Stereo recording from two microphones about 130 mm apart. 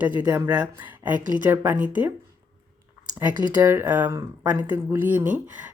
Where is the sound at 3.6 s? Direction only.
20° right (ahead or behind).